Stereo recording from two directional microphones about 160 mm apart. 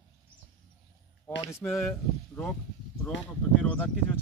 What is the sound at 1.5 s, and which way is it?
Speech, 15° left (ahead or behind).